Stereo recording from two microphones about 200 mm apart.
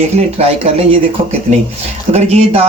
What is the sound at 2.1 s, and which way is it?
Speech, 30° right (ahead or behind).